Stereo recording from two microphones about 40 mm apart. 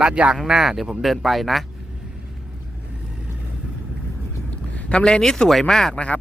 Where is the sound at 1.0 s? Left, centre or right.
Centre.